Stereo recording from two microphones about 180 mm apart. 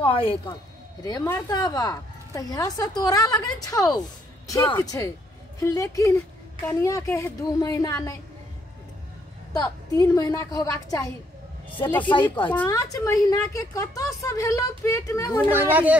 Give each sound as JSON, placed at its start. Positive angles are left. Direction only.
{"t": 0.0, "sound": "speech", "side_deg": 30}
{"t": 1.0, "sound": "a woman's voice", "side_deg": 20}
{"t": 10.0, "sound": "a woman's voice", "side_deg": 20}
{"t": 15.5, "sound": "speech", "side_deg": -10}